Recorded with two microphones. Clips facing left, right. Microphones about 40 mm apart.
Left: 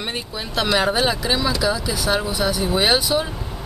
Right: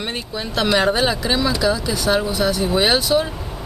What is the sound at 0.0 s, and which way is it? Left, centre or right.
Speech, centre.